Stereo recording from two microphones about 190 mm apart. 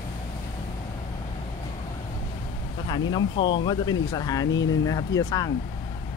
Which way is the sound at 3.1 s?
25° left (ahead or behind).